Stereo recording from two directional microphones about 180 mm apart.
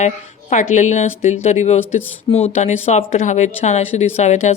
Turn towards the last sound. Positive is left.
turn(degrees=40)  # may be behind; listen again after turning